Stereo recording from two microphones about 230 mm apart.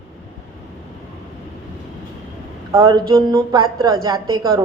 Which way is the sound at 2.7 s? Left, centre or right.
Centre.